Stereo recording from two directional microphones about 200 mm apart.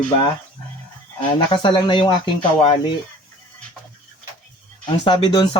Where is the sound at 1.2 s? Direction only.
25° left (ahead or behind).